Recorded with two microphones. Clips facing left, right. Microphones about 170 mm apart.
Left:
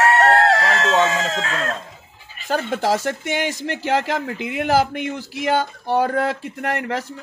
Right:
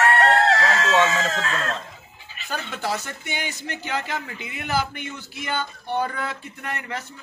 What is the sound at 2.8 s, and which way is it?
Speech, 90° left.